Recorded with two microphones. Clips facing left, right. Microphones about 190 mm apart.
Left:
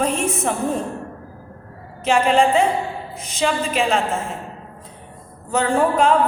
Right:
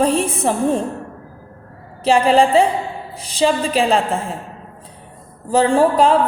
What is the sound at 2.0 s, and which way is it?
A woman's voice, 35° right (ahead or behind).